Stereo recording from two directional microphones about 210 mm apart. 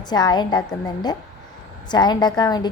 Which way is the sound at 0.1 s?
20° left (ahead or behind).